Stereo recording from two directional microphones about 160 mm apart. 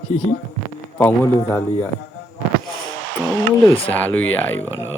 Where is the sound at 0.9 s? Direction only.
10° left (ahead or behind).